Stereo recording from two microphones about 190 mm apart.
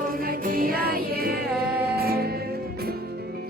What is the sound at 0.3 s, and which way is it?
Music, 50° right (ahead or behind).